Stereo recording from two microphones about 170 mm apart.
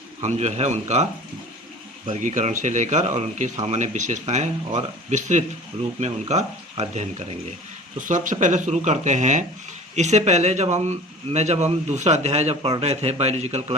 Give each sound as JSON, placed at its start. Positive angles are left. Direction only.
{"t": 0.2, "sound": "a man's voice", "side_deg": -40}
{"t": 2.0, "sound": "a man's voice", "side_deg": -45}